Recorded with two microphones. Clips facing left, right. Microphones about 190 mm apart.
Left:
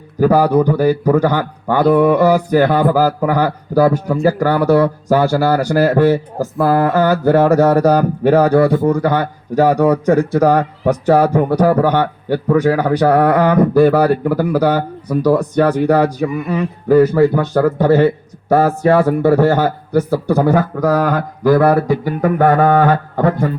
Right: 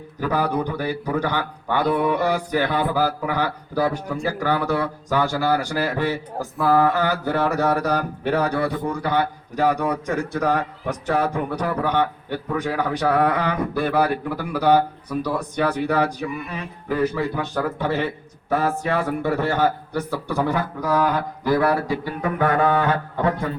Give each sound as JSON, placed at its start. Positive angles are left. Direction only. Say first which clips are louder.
{"t": 0.2, "sound": "speech", "louder": "left 11 dB", "side_deg": 40}
{"t": 11.5, "sound": "a man's voice", "louder": "left 12 dB", "side_deg": 80}
{"t": 12.3, "sound": "speech", "louder": "left 11 dB", "side_deg": 50}